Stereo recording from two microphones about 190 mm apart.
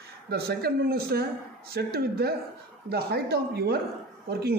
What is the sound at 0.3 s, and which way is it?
Speech, 55° right (ahead or behind).